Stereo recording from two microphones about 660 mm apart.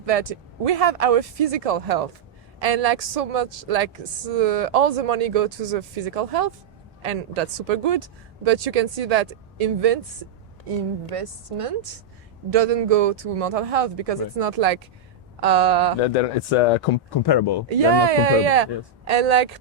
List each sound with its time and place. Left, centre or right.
0.0 s a woman's voice: right
16.0 s speech: left
17.1 s speech: left
17.7 s a woman's voice: right